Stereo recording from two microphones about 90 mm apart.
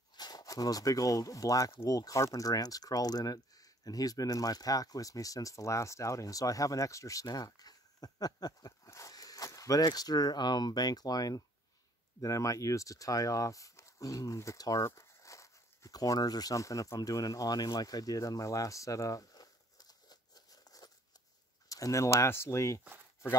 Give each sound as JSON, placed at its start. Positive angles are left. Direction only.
{"t": 0.1, "sound": "speech", "side_deg": 50}
{"t": 14.9, "sound": "a sound", "side_deg": 35}
{"t": 21.6, "sound": "speech", "side_deg": 40}